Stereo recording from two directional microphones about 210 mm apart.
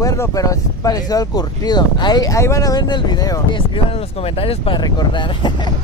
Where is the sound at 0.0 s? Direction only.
15° left (ahead or behind).